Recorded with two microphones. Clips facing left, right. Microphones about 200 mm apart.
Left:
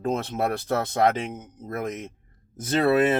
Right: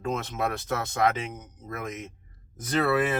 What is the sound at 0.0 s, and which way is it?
Speech, 35° left (ahead or behind).